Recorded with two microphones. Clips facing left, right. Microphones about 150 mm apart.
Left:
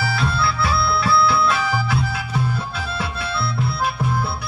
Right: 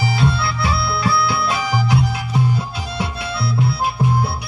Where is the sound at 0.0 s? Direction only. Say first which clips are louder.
Right 2 dB; 20° right (ahead or behind).